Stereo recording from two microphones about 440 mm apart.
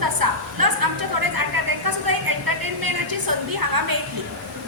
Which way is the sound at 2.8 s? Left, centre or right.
Right.